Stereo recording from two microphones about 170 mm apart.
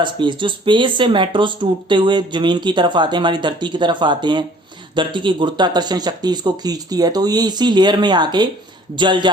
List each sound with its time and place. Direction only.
0.0 s speech: 30° right (ahead or behind)